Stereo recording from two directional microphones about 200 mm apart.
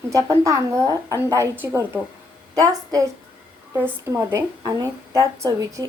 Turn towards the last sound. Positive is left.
turn(degrees=-20)  # may be behind; listen again after turning